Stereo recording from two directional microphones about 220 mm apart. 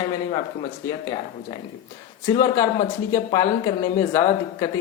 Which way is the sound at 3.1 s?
15° left (ahead or behind).